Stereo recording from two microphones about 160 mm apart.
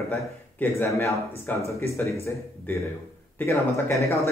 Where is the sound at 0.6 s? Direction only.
15° left (ahead or behind).